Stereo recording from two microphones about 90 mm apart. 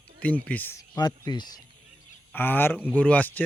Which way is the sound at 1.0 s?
50° left (ahead or behind).